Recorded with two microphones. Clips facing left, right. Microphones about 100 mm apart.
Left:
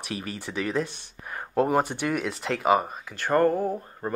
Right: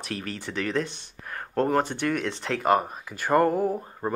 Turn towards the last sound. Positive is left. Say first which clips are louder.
# right 2 dB
turn(degrees=-10)  # may be behind; listen again after turning